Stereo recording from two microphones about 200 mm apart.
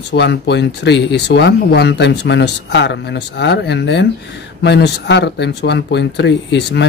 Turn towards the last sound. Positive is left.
turn(degrees=60)  # may be behind; listen again after turning